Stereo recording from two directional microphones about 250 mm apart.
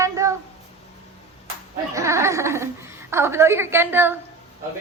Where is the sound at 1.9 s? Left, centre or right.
Centre.